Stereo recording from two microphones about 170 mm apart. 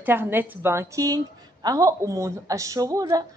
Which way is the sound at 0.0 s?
10° right (ahead or behind).